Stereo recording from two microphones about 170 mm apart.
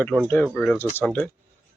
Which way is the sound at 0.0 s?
Centre (ahead or behind).